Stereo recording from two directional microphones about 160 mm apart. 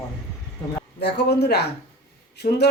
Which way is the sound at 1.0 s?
90° left.